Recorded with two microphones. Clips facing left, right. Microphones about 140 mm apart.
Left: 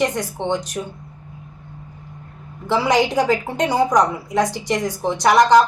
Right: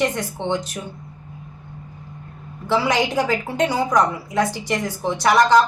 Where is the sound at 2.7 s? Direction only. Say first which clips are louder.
Left 2 dB; 20° left (ahead or behind).